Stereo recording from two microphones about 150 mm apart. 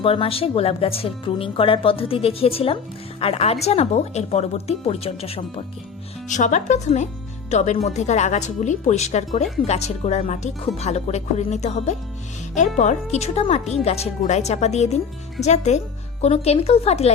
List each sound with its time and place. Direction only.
0.0 s a woman's voice: 40° left (ahead or behind)
6.2 s speech: 55° left (ahead or behind)